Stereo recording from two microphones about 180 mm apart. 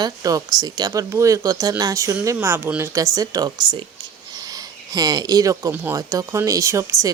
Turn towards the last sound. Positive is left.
turn(degrees=-15)  # may be behind; listen again after turning